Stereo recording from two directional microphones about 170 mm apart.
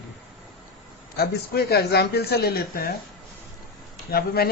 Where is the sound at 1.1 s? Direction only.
70° left (ahead or behind).